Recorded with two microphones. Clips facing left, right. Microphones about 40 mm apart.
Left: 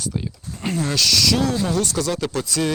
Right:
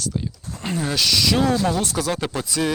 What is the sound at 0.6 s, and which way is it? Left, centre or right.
Speech, centre.